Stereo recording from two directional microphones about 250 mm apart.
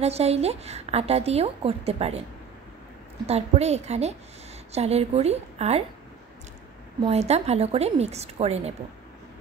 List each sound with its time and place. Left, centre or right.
0.0 s a woman's voice: right
3.3 s a woman's voice: right
7.0 s a woman's voice: right